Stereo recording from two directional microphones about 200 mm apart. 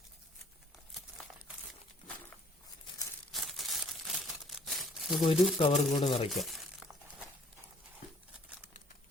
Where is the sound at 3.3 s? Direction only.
Centre (ahead or behind).